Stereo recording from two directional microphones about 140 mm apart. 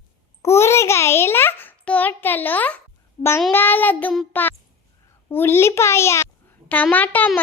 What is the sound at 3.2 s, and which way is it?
Speech, 45° left (ahead or behind).